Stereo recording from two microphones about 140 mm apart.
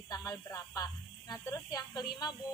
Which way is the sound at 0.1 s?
20° left (ahead or behind).